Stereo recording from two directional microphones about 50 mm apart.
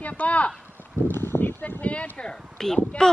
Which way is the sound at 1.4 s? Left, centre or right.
Left.